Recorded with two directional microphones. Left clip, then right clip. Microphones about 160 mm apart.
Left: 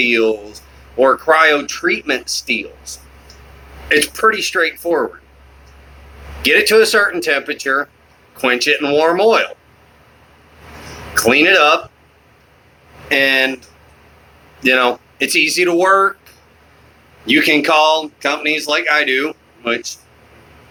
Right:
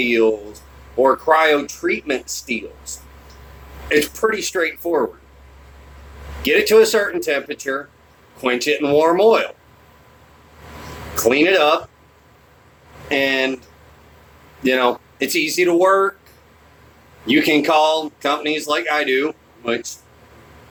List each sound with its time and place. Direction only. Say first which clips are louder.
0.0 s speech: left 2 dB; 15° right (ahead or behind)
6.4 s speech: left 2 dB; 15° right (ahead or behind)
11.1 s speech: left 4 dB; 15° right (ahead or behind)
13.1 s speech: left 5 dB; 15° right (ahead or behind)
17.2 s speech: left 3 dB; 15° right (ahead or behind)